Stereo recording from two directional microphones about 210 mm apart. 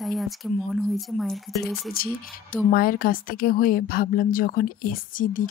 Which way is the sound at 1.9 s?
45° left (ahead or behind).